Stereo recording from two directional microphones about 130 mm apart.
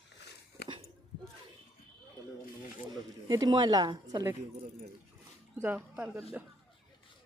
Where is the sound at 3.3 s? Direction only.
30° right (ahead or behind).